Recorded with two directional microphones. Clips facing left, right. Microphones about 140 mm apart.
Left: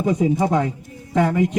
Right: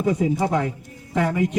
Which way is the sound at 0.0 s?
20° left (ahead or behind).